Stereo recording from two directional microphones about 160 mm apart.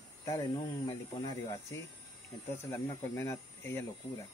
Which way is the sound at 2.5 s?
15° left (ahead or behind).